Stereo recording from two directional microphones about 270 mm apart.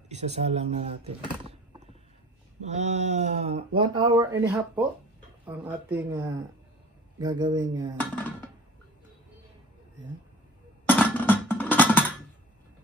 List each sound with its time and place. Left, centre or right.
0.1 s speech: right
10.9 s music: centre